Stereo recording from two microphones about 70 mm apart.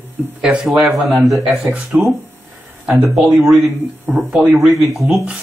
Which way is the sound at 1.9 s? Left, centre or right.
Right.